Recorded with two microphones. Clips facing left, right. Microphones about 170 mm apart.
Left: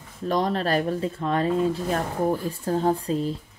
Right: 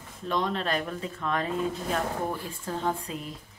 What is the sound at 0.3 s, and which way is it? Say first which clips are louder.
Speech: left 5 dB; 40° left (ahead or behind).